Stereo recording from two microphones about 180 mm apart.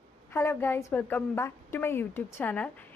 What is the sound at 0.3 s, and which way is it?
A woman's voice, 15° left (ahead or behind).